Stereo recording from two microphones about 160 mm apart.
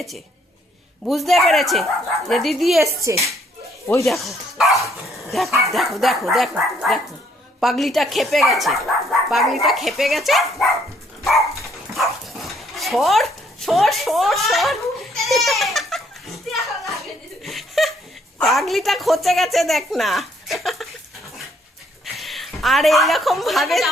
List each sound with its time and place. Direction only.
1.0 s a woman's voice: centre (ahead or behind)
2.8 s speech: 20° right (ahead or behind)
4.0 s a woman's voice: centre (ahead or behind)
4.8 s dog: centre (ahead or behind)
5.5 s speech: 20° right (ahead or behind)
5.7 s a woman's voice: centre (ahead or behind)
11.2 s dog: centre (ahead or behind)
18.4 s a woman's voice: centre (ahead or behind)
22.0 s a woman's voice: centre (ahead or behind)